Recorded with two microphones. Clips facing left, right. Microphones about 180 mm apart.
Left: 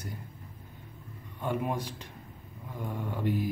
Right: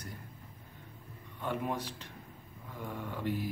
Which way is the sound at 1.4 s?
15° left (ahead or behind).